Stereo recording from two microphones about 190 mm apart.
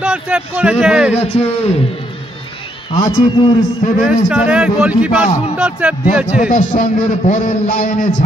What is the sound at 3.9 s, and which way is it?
A man's voice, 5° right (ahead or behind).